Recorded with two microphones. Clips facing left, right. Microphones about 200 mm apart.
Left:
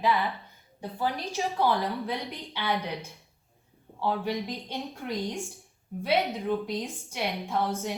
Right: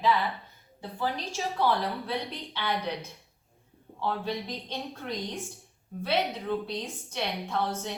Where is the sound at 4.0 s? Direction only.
15° left (ahead or behind).